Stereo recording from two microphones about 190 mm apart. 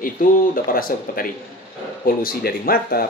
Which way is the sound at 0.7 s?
50° left (ahead or behind).